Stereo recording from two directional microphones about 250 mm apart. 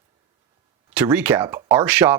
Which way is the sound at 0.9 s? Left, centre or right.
Centre.